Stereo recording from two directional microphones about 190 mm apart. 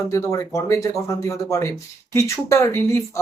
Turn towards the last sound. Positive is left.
turn(degrees=15)  # may be behind; listen again after turning